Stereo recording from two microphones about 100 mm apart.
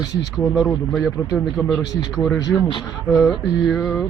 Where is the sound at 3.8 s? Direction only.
15° left (ahead or behind).